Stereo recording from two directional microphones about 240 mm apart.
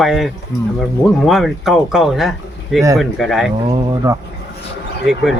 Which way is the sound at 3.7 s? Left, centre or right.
Centre.